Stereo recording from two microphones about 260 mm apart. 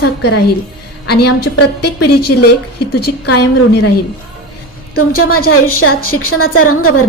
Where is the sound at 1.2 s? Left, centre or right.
Left.